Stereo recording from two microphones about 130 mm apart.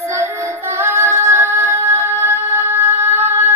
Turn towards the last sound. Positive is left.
turn(degrees=-15)  # may be behind; listen again after turning